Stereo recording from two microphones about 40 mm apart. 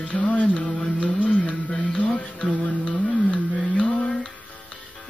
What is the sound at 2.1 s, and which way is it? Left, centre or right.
Music, left.